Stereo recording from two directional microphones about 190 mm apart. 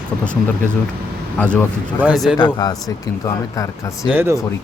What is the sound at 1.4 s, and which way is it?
Speech, 10° left (ahead or behind).